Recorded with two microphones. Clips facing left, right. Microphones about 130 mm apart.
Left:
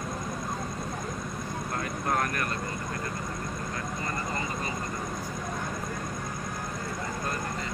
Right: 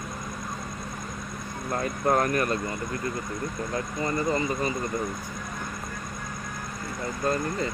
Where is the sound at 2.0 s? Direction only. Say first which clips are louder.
Right 7 dB; 25° right (ahead or behind).